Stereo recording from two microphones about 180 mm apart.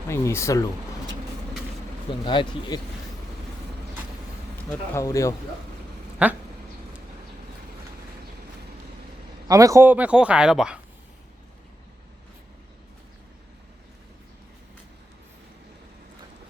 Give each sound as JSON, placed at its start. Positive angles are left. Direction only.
{"t": 0.1, "sound": "speech", "side_deg": 15}
{"t": 2.2, "sound": "speech", "side_deg": 25}
{"t": 4.7, "sound": "speech", "side_deg": 15}
{"t": 6.2, "sound": "speech", "side_deg": -10}
{"t": 9.5, "sound": "speech", "side_deg": -20}